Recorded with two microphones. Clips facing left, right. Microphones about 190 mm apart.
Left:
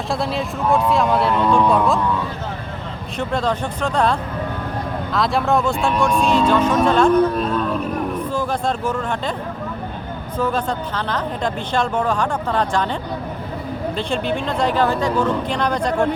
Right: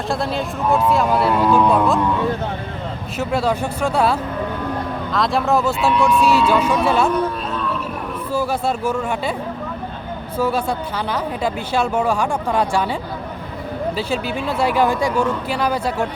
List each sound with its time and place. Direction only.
0.1 s speech: centre (ahead or behind)
3.2 s a woman's voice: 10° right (ahead or behind)
5.9 s speech: 45° left (ahead or behind)
6.5 s a woman's voice: 10° right (ahead or behind)
7.3 s a sound: 45° left (ahead or behind)
8.3 s speech: 10° right (ahead or behind)
10.3 s a woman's voice: 10° right (ahead or behind)